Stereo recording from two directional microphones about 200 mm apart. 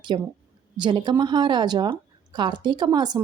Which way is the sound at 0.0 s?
20° right (ahead or behind).